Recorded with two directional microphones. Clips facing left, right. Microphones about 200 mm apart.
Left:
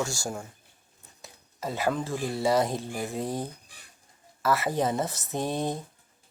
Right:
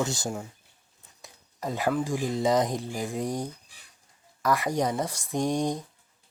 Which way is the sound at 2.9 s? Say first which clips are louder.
Right 1 dB; 15° right (ahead or behind).